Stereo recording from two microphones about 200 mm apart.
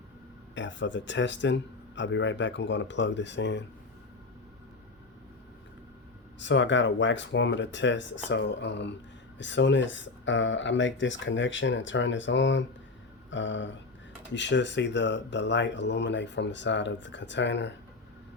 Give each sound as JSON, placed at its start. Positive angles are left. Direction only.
{"t": 0.5, "sound": "speech", "side_deg": 65}
{"t": 6.4, "sound": "speech", "side_deg": 65}